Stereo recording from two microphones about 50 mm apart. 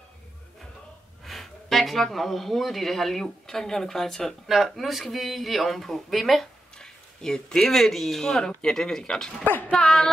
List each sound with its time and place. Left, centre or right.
1.2 s speech: centre
6.4 s speech: centre
9.4 s speech: left
9.7 s speech: centre